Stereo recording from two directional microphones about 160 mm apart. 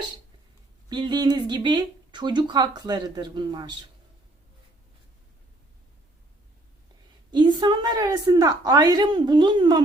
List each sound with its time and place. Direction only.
0.9 s speech: 25° right (ahead or behind)
7.3 s speech: 25° right (ahead or behind)